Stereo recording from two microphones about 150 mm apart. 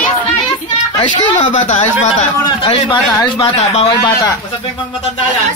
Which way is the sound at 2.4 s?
30° left (ahead or behind).